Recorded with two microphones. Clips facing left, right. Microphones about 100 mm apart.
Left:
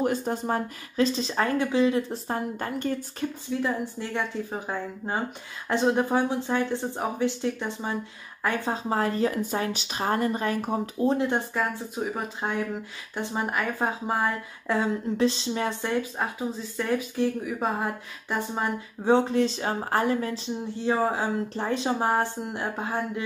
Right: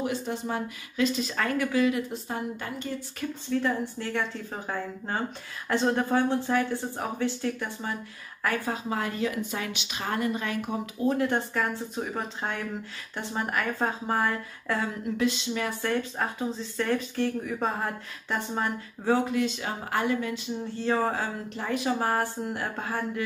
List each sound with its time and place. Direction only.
0.0 s speech: 45° left (ahead or behind); by 2.1 s 30° left (ahead or behind)
2.2 s a woman's voice: 40° left (ahead or behind)
3.2 s speech: 20° left (ahead or behind)
11.2 s speech: 15° left (ahead or behind)
15.1 s speech: 35° left (ahead or behind)
16.0 s speech: 5° left (ahead or behind)
19.1 s speech: 30° left (ahead or behind)
20.7 s speech: 15° left (ahead or behind)
21.5 s speech: 30° left (ahead or behind)
21.9 s speech: 20° left (ahead or behind)